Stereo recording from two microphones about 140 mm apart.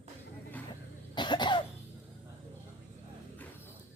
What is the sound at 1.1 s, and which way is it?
Cough, 35° left (ahead or behind).